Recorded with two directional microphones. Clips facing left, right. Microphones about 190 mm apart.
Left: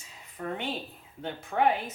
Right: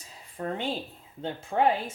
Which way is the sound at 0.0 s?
30° right (ahead or behind).